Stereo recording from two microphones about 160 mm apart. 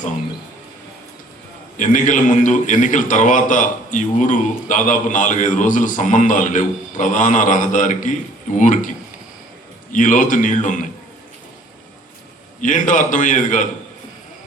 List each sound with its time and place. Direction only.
1.8 s a man's voice: 50° left (ahead or behind)
9.9 s a man's voice: 55° left (ahead or behind)
12.6 s a man's voice: 50° left (ahead or behind)